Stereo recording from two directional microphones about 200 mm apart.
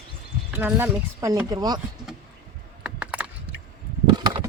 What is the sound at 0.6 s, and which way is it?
Speech, 15° right (ahead or behind).